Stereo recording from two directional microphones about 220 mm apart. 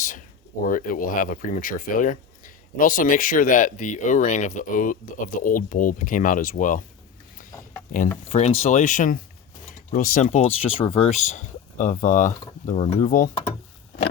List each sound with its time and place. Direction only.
0.7 s speech: 40° left (ahead or behind)
8.3 s speech: 30° left (ahead or behind)